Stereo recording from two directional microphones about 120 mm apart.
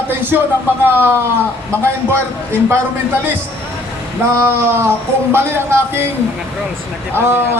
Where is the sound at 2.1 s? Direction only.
20° right (ahead or behind).